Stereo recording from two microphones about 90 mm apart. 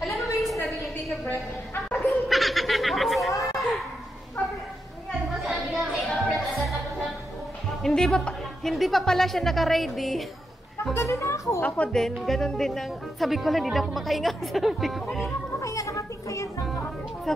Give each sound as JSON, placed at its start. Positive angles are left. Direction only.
{"t": 0.0, "sound": "a sound", "side_deg": 0}
{"t": 2.0, "sound": "snicker", "side_deg": 0}
{"t": 3.5, "sound": "a sound", "side_deg": 0}
{"t": 5.3, "sound": "music", "side_deg": 0}
{"t": 7.8, "sound": "speech", "side_deg": 5}
{"t": 11.0, "sound": "speech", "side_deg": 30}
{"t": 11.6, "sound": "speech", "side_deg": 15}
{"t": 12.2, "sound": "speech", "side_deg": 5}
{"t": 15.6, "sound": "children playing", "side_deg": 35}
{"t": 16.6, "sound": "music", "side_deg": 0}